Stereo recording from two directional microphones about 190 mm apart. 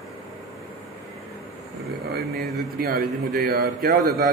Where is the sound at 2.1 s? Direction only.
55° right (ahead or behind).